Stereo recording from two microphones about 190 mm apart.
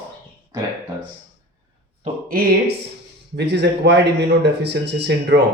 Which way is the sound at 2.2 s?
50° right (ahead or behind).